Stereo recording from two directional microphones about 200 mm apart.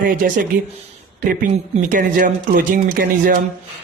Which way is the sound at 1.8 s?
40° right (ahead or behind).